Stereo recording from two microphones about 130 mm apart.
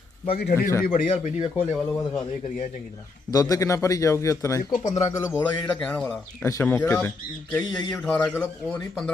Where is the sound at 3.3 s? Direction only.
25° left (ahead or behind); by 6.2 s 10° left (ahead or behind).